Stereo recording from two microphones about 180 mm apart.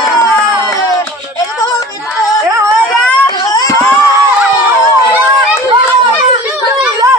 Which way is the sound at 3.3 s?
20° left (ahead or behind).